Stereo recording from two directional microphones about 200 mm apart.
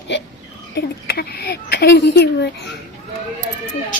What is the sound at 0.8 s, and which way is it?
Child singing, 50° left (ahead or behind).